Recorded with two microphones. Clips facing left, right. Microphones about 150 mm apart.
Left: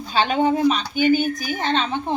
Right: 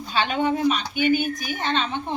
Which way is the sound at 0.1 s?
35° left (ahead or behind).